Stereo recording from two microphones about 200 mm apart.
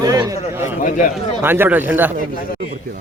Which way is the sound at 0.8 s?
40° left (ahead or behind).